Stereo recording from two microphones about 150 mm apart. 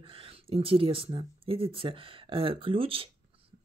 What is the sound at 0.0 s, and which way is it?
Speech, 40° right (ahead or behind).